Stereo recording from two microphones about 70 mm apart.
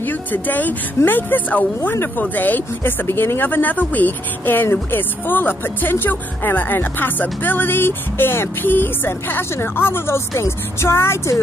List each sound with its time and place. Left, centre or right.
0.0 s speech: left